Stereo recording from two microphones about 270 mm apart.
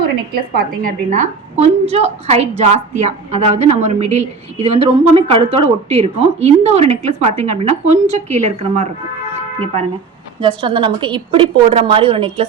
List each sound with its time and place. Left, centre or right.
0.0 s a woman's voice: right
10.4 s a woman's voice: centre